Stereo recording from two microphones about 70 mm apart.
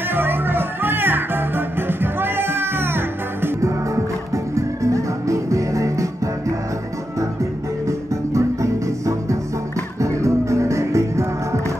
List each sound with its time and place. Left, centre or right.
0.1 s music: right
4.6 s music: right
8.3 s music: right